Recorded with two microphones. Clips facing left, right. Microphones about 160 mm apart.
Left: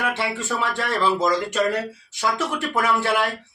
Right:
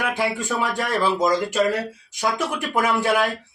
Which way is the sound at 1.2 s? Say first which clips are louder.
Right 1 dB; 20° right (ahead or behind).